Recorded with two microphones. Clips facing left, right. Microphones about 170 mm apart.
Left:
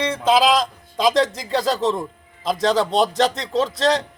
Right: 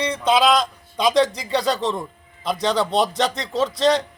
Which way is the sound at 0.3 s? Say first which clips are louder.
Left 1 dB; centre (ahead or behind).